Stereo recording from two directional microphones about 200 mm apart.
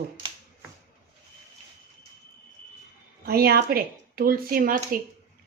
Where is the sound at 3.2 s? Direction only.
50° right (ahead or behind).